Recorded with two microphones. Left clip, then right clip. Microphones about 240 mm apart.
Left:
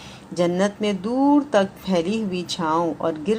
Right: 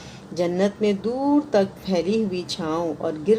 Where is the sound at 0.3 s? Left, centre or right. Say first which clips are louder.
Left 1 dB; left.